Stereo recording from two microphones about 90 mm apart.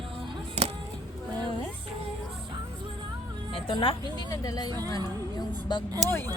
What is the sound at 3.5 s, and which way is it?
Music, 85° left.